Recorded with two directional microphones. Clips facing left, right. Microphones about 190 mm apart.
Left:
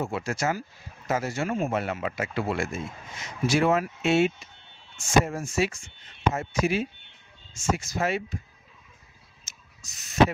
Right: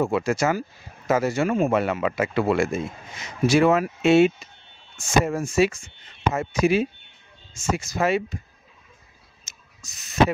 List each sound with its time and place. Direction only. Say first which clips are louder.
0.0 s speech: right 7 dB; 75° right (ahead or behind)
3.4 s speech: right 5 dB; 85° right
9.8 s speech: right 3 dB; 70° right (ahead or behind)